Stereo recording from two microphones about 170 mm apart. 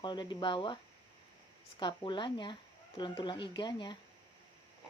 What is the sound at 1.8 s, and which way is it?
A woman's voice, 25° left (ahead or behind).